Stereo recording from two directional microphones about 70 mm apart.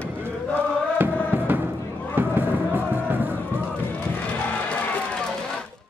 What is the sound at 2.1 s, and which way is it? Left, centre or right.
Fireworks, right.